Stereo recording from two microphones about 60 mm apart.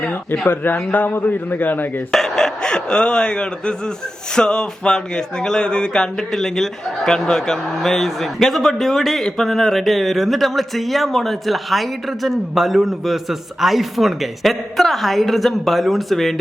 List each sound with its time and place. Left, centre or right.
0.0 s a man's voice: left
2.1 s speech: centre